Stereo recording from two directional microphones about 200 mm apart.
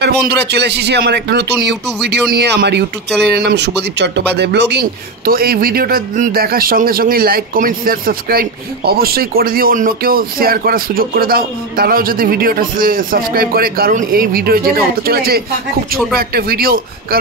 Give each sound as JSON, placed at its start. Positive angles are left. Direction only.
{"t": 0.0, "sound": "a man's voice", "side_deg": -55}